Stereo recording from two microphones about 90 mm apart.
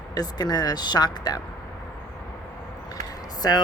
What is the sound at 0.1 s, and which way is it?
Speech, 45° left (ahead or behind).